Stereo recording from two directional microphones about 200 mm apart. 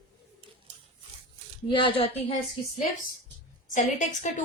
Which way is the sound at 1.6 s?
25° left (ahead or behind).